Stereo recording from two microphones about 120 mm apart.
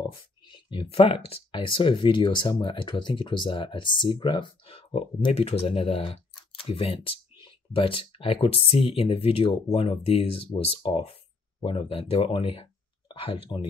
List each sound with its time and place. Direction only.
0.5 s speech: 40° left (ahead or behind)